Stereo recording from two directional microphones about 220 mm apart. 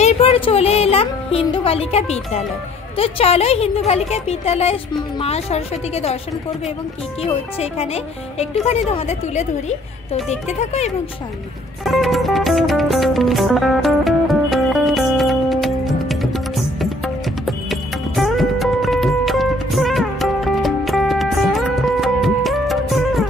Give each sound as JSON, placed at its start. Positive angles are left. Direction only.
{"t": 0.0, "sound": "music", "side_deg": 25}
{"t": 3.0, "sound": "speech", "side_deg": 25}
{"t": 7.2, "sound": "speech", "side_deg": 25}
{"t": 11.8, "sound": "music", "side_deg": 0}